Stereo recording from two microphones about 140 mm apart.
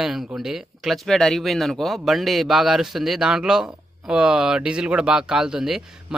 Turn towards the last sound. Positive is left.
turn(degrees=-5)  # may be behind; listen again after turning